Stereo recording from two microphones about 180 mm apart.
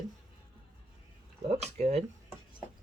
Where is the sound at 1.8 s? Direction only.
35° right (ahead or behind).